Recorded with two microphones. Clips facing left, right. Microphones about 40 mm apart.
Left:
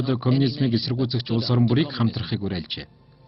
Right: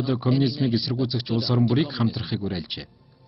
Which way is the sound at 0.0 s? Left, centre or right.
Centre.